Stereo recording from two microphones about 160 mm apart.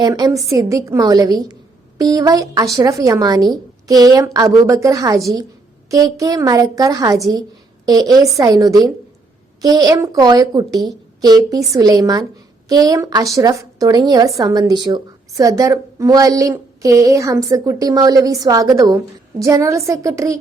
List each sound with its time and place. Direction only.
0.0 s a woman's voice: 25° right (ahead or behind)